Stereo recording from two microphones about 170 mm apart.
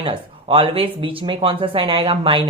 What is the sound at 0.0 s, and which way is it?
Speech, 30° right (ahead or behind).